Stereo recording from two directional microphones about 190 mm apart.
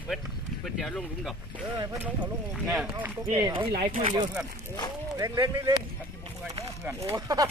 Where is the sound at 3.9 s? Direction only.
30° right (ahead or behind).